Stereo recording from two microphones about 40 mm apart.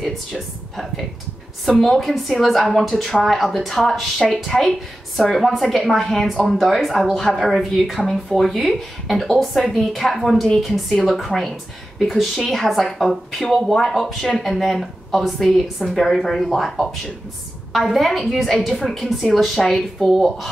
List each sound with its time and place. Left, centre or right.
0.0 s speech: centre